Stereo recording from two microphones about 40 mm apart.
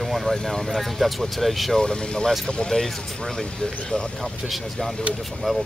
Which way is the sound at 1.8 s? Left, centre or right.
Centre.